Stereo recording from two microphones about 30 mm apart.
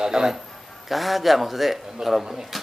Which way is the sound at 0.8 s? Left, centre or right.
Centre.